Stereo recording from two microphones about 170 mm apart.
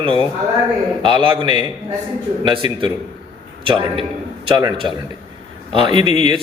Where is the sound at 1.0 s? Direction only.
30° right (ahead or behind).